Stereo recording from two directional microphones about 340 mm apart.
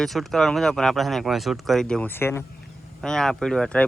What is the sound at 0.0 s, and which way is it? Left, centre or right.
Speech, centre.